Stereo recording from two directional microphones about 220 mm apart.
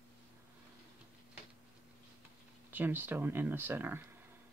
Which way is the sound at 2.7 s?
10° right (ahead or behind).